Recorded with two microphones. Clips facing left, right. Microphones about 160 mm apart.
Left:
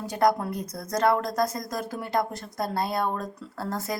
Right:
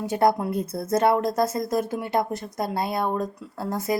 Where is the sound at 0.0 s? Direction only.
25° right (ahead or behind).